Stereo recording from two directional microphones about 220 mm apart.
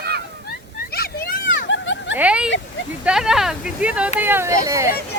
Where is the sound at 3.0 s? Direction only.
5° right (ahead or behind).